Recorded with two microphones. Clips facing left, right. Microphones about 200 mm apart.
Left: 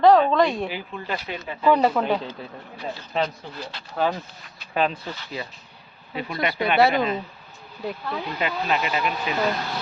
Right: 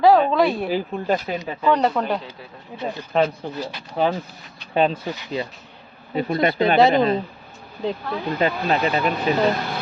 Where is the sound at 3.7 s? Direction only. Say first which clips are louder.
Right 2 dB; 20° right (ahead or behind).